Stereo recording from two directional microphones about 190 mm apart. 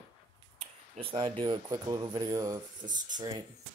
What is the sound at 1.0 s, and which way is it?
Speech, 25° right (ahead or behind).